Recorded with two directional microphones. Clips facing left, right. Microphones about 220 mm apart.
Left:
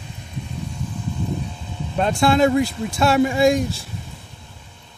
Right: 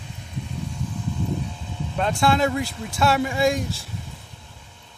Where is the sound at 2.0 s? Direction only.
20° left (ahead or behind).